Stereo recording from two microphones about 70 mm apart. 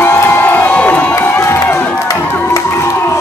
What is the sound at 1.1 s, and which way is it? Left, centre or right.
Crowd, left.